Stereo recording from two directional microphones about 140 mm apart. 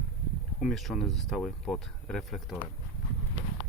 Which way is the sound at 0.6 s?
Centre (ahead or behind).